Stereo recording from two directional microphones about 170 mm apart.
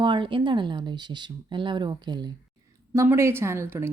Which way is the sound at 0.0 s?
30° right (ahead or behind).